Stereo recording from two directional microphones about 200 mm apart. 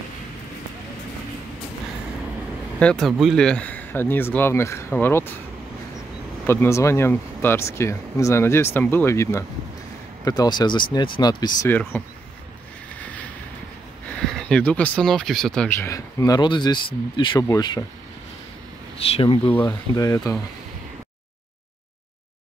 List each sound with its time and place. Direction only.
2.8 s speech: 5° left (ahead or behind)
6.4 s speech: 10° left (ahead or behind)
11.7 s speech: 10° left (ahead or behind)
14.1 s speech: 5° left (ahead or behind)
18.9 s speech: 30° left (ahead or behind)